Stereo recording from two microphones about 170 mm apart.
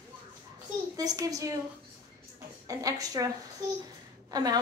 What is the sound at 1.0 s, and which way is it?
Speech, 20° right (ahead or behind).